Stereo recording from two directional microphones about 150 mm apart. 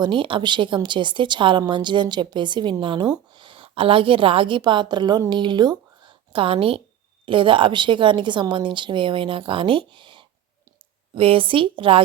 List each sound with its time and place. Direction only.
0.0 s a woman's voice: 35° right (ahead or behind)